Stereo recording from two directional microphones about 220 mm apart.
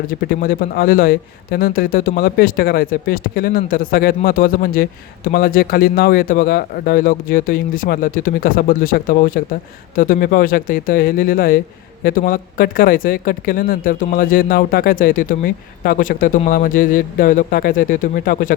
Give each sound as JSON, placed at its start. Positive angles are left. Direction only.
{"t": 0.1, "sound": "speech", "side_deg": 40}